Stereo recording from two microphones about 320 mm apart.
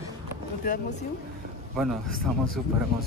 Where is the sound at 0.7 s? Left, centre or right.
Left.